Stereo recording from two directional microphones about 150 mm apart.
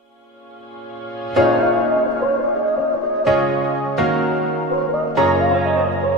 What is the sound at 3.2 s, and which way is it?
Music, centre (ahead or behind).